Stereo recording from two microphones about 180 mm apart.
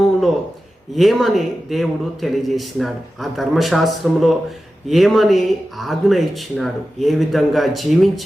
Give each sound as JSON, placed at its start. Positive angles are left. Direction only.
{"t": 0.9, "sound": "a man's voice", "side_deg": 0}